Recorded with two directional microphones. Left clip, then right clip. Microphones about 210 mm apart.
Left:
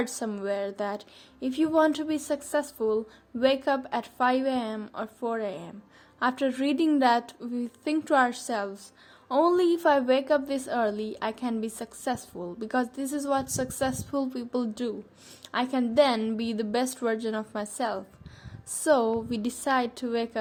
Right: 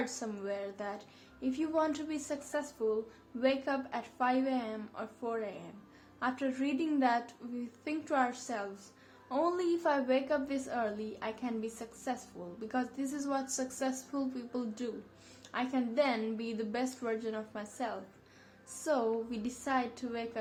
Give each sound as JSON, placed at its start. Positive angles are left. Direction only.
{"t": 0.0, "sound": "a woman's voice", "side_deg": 45}